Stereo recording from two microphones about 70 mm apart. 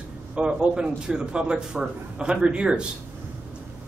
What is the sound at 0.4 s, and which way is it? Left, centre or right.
A man's voice, centre.